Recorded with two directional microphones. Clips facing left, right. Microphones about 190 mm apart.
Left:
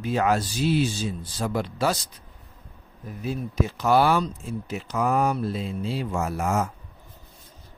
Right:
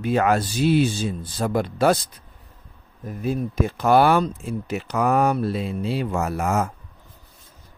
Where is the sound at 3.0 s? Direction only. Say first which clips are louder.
Right 5 dB; 50° right (ahead or behind).